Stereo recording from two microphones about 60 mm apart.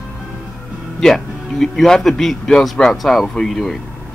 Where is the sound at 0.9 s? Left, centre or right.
Centre.